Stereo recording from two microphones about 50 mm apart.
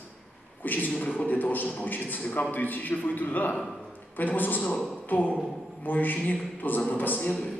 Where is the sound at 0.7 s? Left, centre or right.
Left.